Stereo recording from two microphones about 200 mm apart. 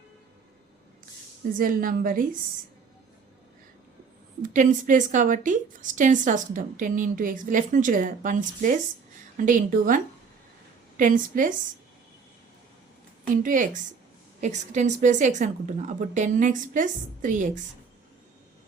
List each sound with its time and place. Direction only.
1.5 s speech: 45° right (ahead or behind)
4.4 s speech: 40° right (ahead or behind)
13.3 s speech: 40° right (ahead or behind)